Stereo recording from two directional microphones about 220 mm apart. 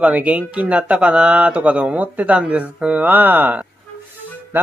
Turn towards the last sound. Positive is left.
turn(degrees=-10)  # may be behind; listen again after turning